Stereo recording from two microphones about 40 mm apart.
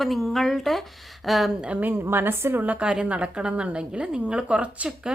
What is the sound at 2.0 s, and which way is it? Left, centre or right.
Speech, right.